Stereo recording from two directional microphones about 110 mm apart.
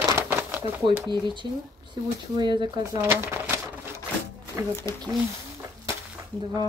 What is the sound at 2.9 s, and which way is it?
Typewriter, 25° right (ahead or behind).